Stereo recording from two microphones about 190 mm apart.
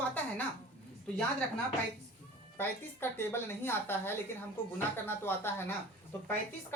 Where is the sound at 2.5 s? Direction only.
10° left (ahead or behind).